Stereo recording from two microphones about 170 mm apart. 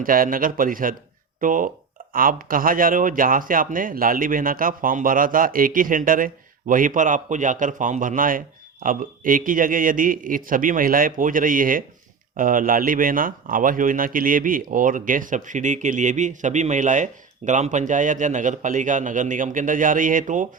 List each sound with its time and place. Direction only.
0.0 s a man's voice: 55° right (ahead or behind)